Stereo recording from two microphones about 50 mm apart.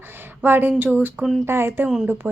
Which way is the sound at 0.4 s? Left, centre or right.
Right.